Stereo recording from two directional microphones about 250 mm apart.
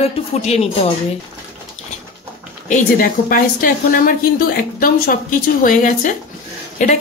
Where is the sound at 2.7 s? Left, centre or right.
Left.